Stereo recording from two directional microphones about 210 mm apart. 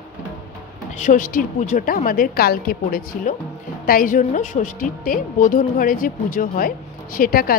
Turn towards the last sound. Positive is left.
turn(degrees=45)  # may be behind; listen again after turning